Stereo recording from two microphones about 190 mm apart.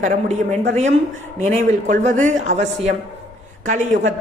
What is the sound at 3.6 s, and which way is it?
Speech, 40° right (ahead or behind).